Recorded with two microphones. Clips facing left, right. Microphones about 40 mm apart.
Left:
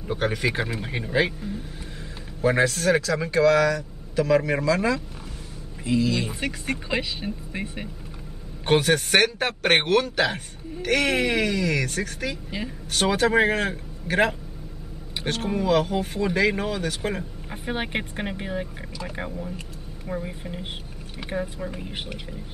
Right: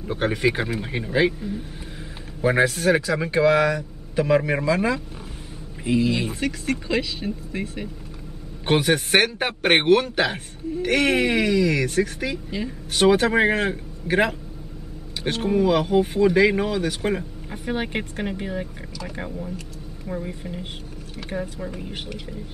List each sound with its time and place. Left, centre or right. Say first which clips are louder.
0.2 s a man's voice: right 4 dB; centre
2.4 s a man's voice: right 2 dB; centre
6.4 s speech: right 3 dB; centre
8.6 s a man's voice: even; centre
12.4 s speech: right 3 dB; centre
12.9 s a man's voice: right 3 dB; centre
17.5 s speech: right 2 dB; centre